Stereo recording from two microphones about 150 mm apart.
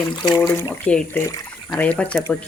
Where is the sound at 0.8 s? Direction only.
10° left (ahead or behind).